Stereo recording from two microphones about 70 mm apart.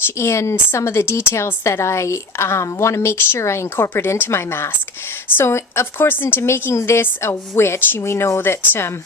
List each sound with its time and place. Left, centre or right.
0.2 s a woman's voice: left